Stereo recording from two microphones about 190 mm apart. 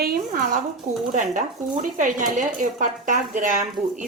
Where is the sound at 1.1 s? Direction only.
45° right (ahead or behind).